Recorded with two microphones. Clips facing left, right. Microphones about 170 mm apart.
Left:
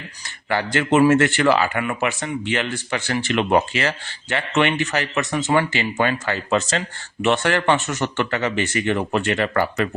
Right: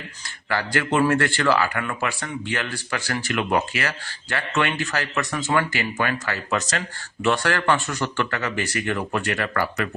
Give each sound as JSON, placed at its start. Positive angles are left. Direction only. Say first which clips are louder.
{"t": 0.4, "sound": "speech", "louder": "left 3 dB", "side_deg": 20}